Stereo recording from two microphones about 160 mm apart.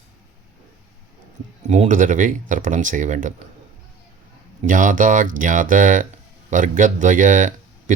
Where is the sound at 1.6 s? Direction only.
50° right (ahead or behind).